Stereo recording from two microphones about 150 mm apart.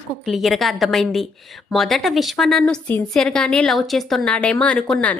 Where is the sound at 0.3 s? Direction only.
Centre (ahead or behind).